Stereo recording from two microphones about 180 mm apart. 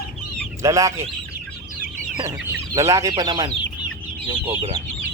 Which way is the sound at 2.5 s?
15° right (ahead or behind).